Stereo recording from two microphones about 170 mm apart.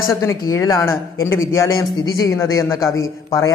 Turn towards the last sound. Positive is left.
turn(degrees=20)  # may be behind; listen again after turning